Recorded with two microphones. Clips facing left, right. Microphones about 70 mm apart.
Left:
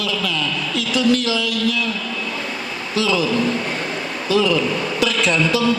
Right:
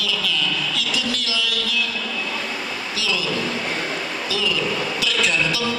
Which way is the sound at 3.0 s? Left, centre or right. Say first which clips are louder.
Left 7 dB; left.